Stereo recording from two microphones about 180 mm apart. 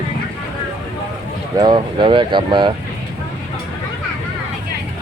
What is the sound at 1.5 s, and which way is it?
Speech, 25° right (ahead or behind).